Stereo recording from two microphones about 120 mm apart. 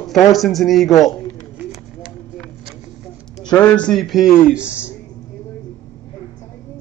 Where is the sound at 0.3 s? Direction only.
Centre (ahead or behind).